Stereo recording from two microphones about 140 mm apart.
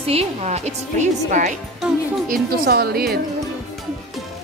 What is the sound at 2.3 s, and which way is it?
Speech, 90° right.